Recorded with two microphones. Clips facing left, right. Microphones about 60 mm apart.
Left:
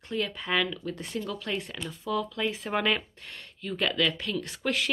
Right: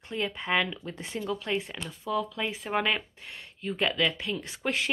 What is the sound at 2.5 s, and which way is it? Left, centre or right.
Speech, centre.